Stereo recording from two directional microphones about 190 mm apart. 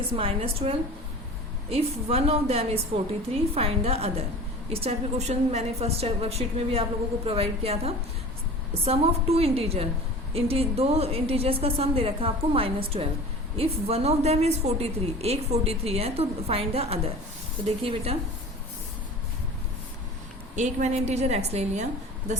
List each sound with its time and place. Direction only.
0.1 s a woman's voice: 30° right (ahead or behind)
20.6 s a woman's voice: 40° right (ahead or behind)